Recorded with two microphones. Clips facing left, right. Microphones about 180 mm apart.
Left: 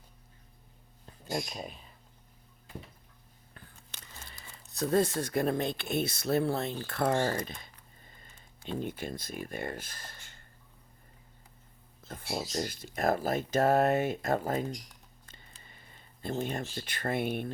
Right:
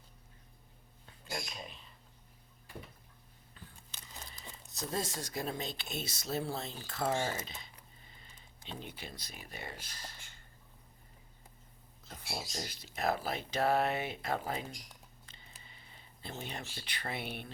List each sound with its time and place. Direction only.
3.5 s biting: 65° left (ahead or behind)
4.7 s speech: 60° left (ahead or behind)
12.0 s speech: 55° left (ahead or behind)
15.3 s a sound: 45° left (ahead or behind)